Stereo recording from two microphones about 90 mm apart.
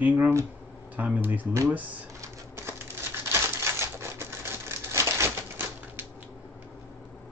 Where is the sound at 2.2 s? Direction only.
30° right (ahead or behind).